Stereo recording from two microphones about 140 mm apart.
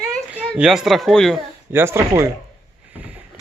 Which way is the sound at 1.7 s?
20° right (ahead or behind).